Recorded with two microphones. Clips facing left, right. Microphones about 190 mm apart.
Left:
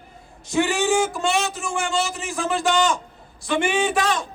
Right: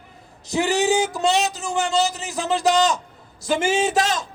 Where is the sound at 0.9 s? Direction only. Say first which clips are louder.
Right 1 dB; 20° right (ahead or behind).